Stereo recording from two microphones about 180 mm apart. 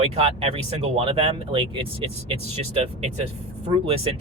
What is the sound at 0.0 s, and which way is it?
Speech, 30° right (ahead or behind).